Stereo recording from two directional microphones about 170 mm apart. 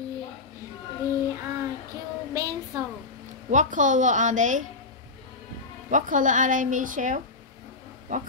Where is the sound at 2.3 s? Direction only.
20° right (ahead or behind).